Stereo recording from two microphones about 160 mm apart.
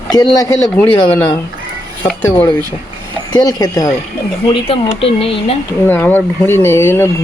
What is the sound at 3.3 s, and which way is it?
Speech, 25° left (ahead or behind).